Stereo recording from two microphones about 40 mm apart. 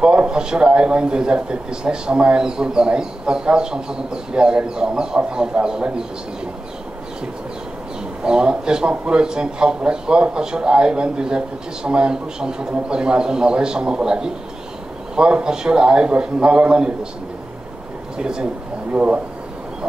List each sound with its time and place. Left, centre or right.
0.0 s a man's voice: right
8.2 s a man's voice: right
18.1 s speech: right